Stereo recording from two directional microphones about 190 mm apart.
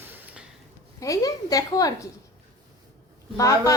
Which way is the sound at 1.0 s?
20° left (ahead or behind).